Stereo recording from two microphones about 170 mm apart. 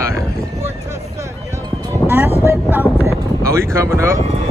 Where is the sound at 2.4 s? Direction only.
15° right (ahead or behind).